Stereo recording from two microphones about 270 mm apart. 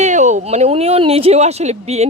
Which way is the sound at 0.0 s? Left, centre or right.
Right.